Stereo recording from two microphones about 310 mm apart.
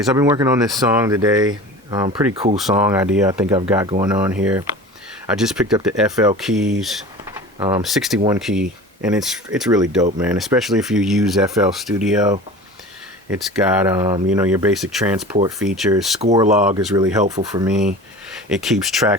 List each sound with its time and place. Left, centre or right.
0.2 s speech: centre
2.6 s speech: centre
13.3 s speech: centre
16.2 s speech: centre